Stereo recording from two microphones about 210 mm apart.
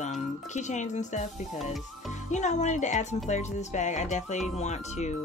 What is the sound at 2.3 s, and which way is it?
Speech, 35° left (ahead or behind).